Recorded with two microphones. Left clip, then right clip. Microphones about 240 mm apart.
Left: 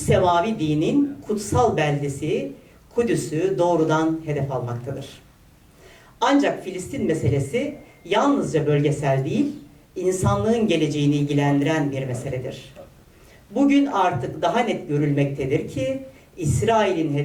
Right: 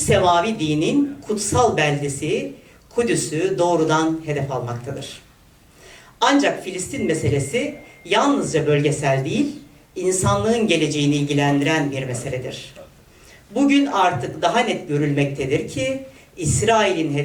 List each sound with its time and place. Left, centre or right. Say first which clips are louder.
0.0 s speech: right 2 dB; centre
4.5 s speech: right 2 dB; centre
4.9 s speech: right 3 dB; centre
6.2 s speech: right 2 dB; centre